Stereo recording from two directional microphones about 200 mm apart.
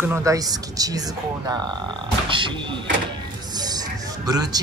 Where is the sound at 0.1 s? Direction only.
15° right (ahead or behind).